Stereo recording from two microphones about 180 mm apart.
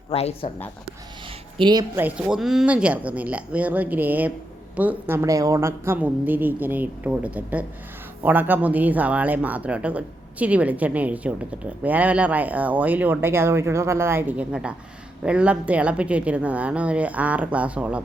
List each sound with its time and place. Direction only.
0.1 s speech: 35° left (ahead or behind)
1.5 s a woman's voice: 25° right (ahead or behind)
2.0 s speech: 10° right (ahead or behind)